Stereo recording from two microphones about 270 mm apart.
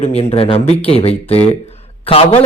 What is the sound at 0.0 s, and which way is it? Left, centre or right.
A man's voice, left.